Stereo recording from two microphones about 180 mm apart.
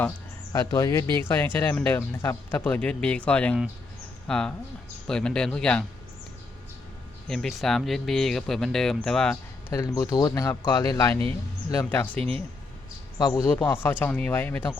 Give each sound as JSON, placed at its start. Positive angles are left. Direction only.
{"t": 0.5, "sound": "speech", "side_deg": 20}
{"t": 7.3, "sound": "speech", "side_deg": 0}
{"t": 13.1, "sound": "speech", "side_deg": 20}